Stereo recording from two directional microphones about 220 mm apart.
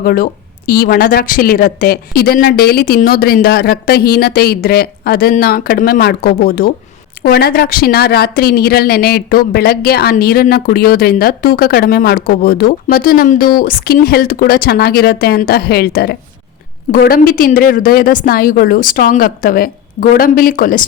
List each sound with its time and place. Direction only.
0.0 s a woman's voice: 40° left (ahead or behind)